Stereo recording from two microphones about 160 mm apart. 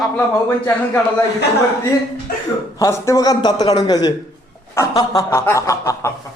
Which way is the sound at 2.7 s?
20° left (ahead or behind).